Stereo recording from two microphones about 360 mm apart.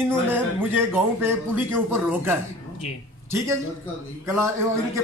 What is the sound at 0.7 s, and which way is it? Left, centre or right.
A man's voice, centre.